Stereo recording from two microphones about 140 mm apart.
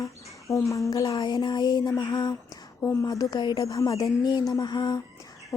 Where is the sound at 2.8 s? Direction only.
20° left (ahead or behind).